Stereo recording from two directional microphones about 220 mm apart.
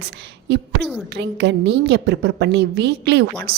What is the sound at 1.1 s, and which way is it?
A woman's voice, 50° right (ahead or behind).